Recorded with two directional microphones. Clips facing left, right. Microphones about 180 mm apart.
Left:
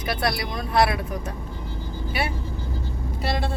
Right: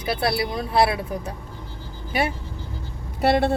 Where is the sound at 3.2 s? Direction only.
60° right (ahead or behind).